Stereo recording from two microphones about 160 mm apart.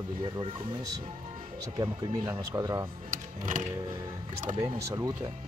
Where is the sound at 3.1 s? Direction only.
55° right (ahead or behind).